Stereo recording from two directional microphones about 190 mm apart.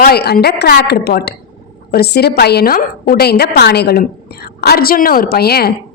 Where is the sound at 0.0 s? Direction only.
55° left (ahead or behind).